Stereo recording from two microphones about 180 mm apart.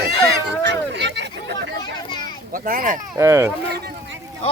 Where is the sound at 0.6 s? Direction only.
75° right (ahead or behind).